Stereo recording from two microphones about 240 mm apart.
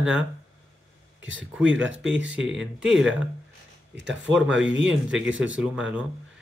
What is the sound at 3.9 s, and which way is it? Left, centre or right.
Speech, right.